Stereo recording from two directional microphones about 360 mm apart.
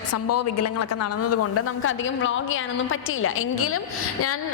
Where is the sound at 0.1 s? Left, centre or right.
Left.